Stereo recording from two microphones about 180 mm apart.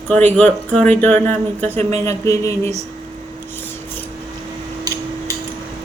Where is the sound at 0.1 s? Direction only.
10° left (ahead or behind).